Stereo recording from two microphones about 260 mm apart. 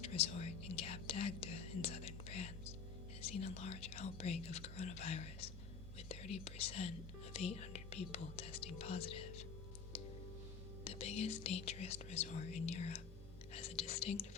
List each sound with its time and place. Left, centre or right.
0.0 s speech: left
9.9 s music: left
10.8 s speech: left